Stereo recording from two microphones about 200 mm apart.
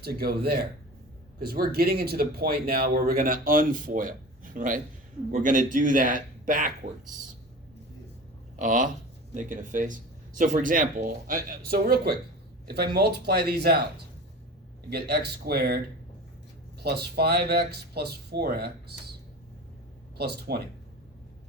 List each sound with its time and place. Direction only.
0.0 s speech: 50° right (ahead or behind)
8.5 s speech: 40° right (ahead or behind)
14.8 s speech: 50° right (ahead or behind)
16.8 s speech: 55° right (ahead or behind)
20.1 s speech: 50° right (ahead or behind)